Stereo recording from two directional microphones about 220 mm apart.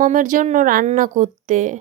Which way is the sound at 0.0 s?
40° right (ahead or behind).